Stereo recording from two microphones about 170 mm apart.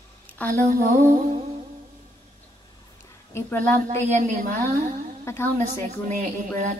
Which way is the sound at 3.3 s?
15° left (ahead or behind).